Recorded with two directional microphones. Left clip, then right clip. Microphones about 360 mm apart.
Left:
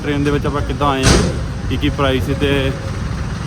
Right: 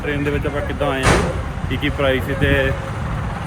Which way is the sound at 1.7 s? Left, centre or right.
Centre.